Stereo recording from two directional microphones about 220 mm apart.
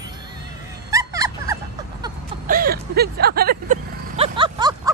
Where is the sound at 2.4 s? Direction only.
40° right (ahead or behind).